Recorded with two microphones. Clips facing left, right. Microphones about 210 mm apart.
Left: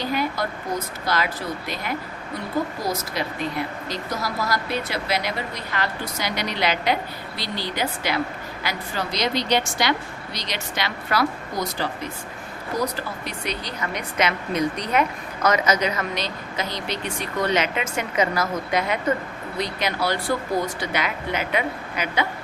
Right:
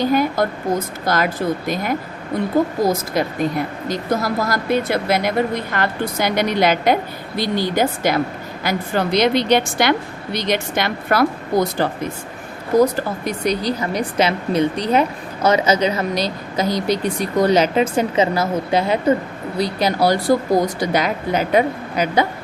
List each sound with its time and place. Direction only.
0.0 s a woman's voice: 50° right (ahead or behind)